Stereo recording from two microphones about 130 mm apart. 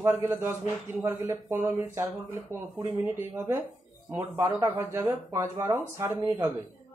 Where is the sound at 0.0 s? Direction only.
15° right (ahead or behind).